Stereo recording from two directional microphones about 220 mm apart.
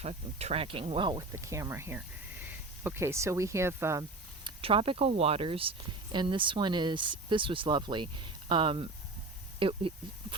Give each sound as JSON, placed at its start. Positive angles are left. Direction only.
{"t": 0.0, "sound": "speech", "side_deg": -30}
{"t": 4.4, "sound": "speech", "side_deg": -25}